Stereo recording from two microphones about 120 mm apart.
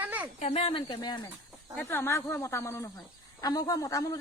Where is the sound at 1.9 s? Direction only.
20° left (ahead or behind).